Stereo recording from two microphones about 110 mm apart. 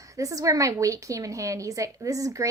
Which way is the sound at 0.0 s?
30° right (ahead or behind).